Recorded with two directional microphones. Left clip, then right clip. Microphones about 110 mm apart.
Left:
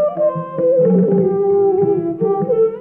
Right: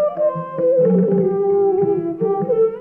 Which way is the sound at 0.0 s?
30° right (ahead or behind).